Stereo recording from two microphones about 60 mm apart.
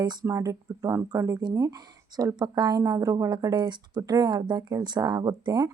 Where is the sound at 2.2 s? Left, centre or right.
Right.